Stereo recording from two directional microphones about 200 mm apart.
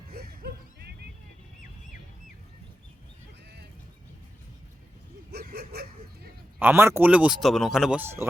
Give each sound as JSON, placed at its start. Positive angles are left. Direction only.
{"t": 0.1, "sound": "music", "side_deg": -50}
{"t": 5.3, "sound": "a sound", "side_deg": -55}
{"t": 6.6, "sound": "speech", "side_deg": -10}